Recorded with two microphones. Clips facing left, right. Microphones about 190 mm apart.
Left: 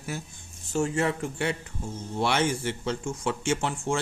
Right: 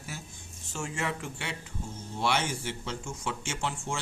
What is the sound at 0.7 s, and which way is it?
Speech, 40° left (ahead or behind).